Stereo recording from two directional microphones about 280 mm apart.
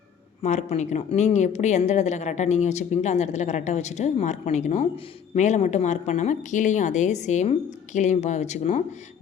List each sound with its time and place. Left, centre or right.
0.4 s a woman's voice: left